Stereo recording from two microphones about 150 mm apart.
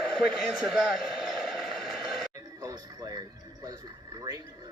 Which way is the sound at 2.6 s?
25° right (ahead or behind).